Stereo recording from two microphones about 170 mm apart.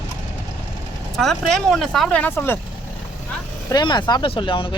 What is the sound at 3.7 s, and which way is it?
Speech, 25° left (ahead or behind).